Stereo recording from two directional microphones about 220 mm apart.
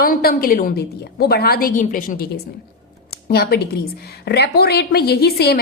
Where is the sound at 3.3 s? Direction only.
45° left (ahead or behind).